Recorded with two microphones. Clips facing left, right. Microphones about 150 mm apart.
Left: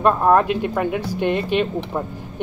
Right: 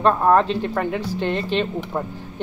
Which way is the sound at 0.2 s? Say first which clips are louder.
Left 1 dB; 10° left (ahead or behind).